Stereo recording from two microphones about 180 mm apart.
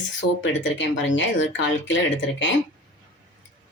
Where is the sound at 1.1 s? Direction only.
90° left.